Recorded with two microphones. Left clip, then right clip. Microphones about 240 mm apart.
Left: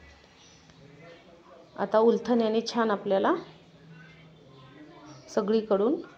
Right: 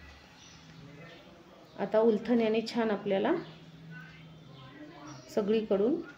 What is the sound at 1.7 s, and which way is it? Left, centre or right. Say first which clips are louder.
A woman's voice: left 4 dB; centre.